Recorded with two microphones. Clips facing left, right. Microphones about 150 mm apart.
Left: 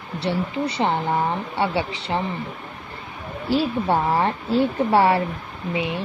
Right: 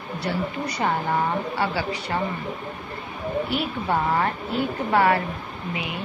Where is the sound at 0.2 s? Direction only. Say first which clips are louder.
Left 4 dB; 25° left (ahead or behind).